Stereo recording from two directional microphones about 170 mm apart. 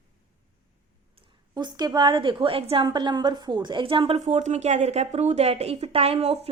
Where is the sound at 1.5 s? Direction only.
25° right (ahead or behind).